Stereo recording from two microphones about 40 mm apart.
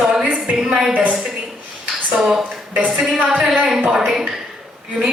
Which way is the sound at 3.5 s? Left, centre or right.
Centre.